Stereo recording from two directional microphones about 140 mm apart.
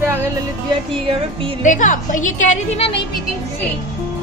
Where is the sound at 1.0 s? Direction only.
40° right (ahead or behind).